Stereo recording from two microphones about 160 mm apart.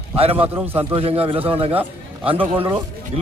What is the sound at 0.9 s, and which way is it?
A man's voice, 35° right (ahead or behind).